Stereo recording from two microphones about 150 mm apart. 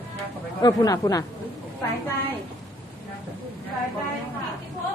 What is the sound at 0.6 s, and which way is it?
Speech, 25° left (ahead or behind).